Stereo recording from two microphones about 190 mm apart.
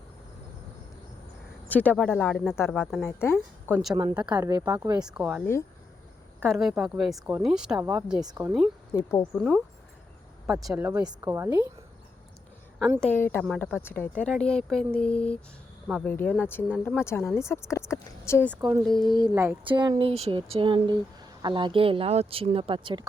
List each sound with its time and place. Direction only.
1.6 s a woman's voice: 10° left (ahead or behind)
3.1 s a woman's voice: 15° left (ahead or behind)
3.9 s a woman's voice: 20° right (ahead or behind)
4.9 s speech: 5° right (ahead or behind)
6.4 s speech: centre (ahead or behind)
8.2 s a woman's voice: 20° right (ahead or behind)
8.4 s speech: centre (ahead or behind)
8.9 s a woman's voice: 15° left (ahead or behind)
9.3 s a woman's voice: centre (ahead or behind); by 11.7 s 15° right (ahead or behind)
13.0 s a woman's voice: 10° left (ahead or behind)
16.4 s a woman's voice: 10° left (ahead or behind)
19.0 s a woman's voice: 20° right (ahead or behind)